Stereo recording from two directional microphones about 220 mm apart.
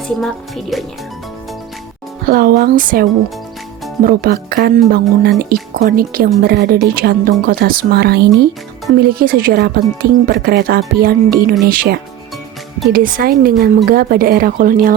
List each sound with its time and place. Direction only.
0.2 s a woman's voice: centre (ahead or behind)
2.2 s speech: 40° right (ahead or behind)